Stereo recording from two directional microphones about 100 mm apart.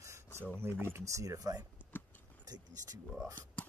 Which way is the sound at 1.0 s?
30° right (ahead or behind).